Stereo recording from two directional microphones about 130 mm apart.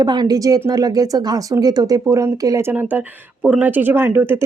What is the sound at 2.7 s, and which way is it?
Speech, 15° right (ahead or behind).